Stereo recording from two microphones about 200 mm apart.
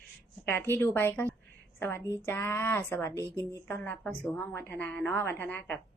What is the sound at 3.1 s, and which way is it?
Speech, 15° right (ahead or behind).